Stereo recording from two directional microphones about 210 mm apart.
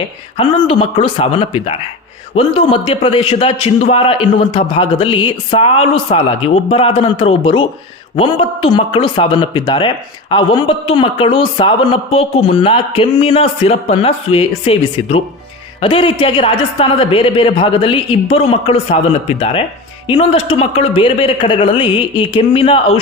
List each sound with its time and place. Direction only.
0.3 s a man's voice: 25° left (ahead or behind)
20.1 s a man's voice: 25° left (ahead or behind)